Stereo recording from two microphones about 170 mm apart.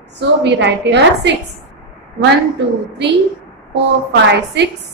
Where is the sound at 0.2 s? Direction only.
90° right.